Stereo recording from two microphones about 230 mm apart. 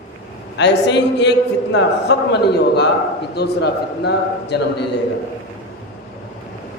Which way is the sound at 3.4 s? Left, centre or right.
Left.